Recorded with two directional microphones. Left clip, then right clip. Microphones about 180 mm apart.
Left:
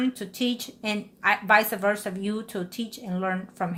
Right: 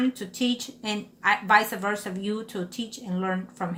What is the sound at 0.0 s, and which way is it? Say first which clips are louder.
A woman's voice: right 1 dB; 45° left (ahead or behind).